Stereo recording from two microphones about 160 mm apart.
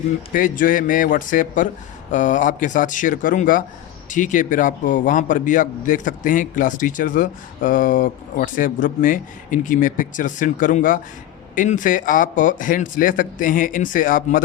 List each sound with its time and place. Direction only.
0.3 s a man's voice: 55° left (ahead or behind)